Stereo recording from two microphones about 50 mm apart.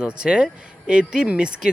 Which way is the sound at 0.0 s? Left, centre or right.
Centre.